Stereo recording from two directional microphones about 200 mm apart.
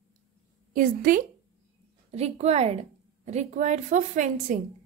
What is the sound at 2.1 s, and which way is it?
A woman's voice, 30° right (ahead or behind).